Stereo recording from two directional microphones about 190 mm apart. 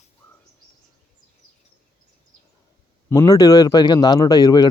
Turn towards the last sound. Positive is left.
turn(degrees=20)  # may be behind; listen again after turning